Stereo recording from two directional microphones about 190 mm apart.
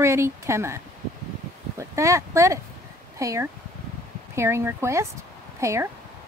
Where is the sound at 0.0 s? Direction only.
15° right (ahead or behind).